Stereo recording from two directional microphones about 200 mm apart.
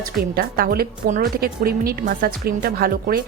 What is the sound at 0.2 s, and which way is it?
A woman's voice, 45° right (ahead or behind).